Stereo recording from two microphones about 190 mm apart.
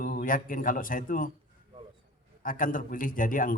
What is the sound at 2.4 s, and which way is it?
Speech, 45° left (ahead or behind).